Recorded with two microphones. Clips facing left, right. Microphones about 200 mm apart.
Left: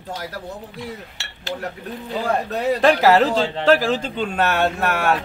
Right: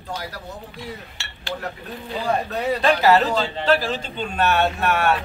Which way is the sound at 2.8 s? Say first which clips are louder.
Left 2 dB; 90° left.